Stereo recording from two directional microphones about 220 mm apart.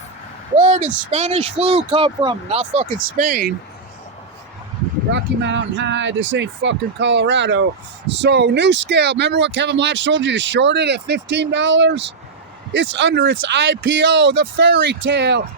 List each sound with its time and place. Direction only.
0.5 s speech: 35° right (ahead or behind)
5.1 s speech: 55° right (ahead or behind)